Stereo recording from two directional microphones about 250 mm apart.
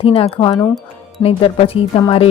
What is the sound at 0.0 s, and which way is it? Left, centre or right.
Speech, left.